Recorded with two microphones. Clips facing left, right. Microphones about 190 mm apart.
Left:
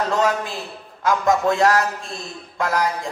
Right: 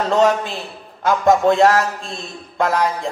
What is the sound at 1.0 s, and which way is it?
A man's voice, 30° right (ahead or behind).